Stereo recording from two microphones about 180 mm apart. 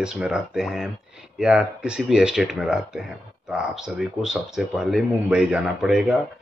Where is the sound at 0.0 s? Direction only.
5° right (ahead or behind).